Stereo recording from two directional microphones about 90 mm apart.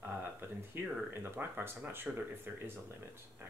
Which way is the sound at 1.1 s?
25° right (ahead or behind).